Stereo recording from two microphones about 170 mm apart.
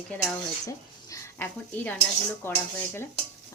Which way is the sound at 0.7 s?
20° left (ahead or behind).